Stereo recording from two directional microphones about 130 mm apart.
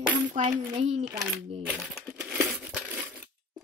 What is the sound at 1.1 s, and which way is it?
Coin, 5° right (ahead or behind).